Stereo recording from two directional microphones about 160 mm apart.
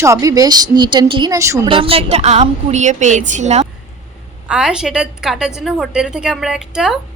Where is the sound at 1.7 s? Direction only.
35° right (ahead or behind).